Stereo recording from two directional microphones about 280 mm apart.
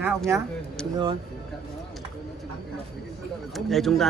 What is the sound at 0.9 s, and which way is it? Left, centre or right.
Speech, centre.